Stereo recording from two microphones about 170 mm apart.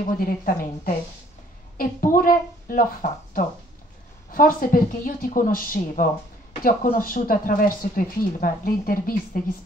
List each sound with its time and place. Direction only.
0.2 s speech: 55° left (ahead or behind)